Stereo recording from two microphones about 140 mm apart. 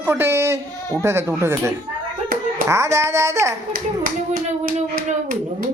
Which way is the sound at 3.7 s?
90° right.